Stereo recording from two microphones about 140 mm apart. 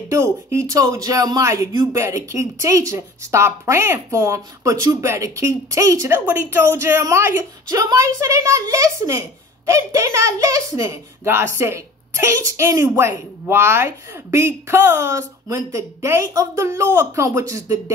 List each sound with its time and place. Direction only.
0.1 s speech: 20° right (ahead or behind)